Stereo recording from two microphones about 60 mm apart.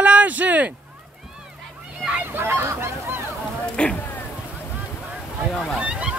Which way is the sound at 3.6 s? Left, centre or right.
Centre.